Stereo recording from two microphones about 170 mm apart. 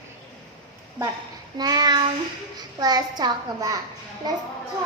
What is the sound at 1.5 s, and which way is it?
A woman's voice, 25° right (ahead or behind).